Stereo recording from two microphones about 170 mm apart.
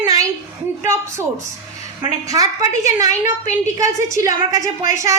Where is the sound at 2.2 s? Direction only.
20° right (ahead or behind).